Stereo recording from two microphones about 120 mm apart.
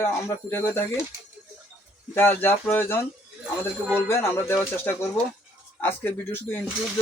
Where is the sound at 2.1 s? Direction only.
15° left (ahead or behind).